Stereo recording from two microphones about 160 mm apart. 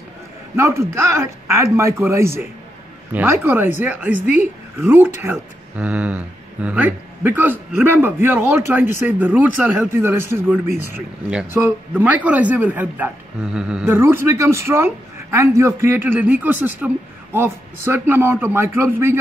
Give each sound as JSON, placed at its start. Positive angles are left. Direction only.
{"t": 0.6, "sound": "speech", "side_deg": -15}